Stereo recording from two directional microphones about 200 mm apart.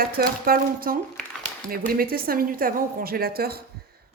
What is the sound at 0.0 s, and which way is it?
A woman's voice, 45° right (ahead or behind).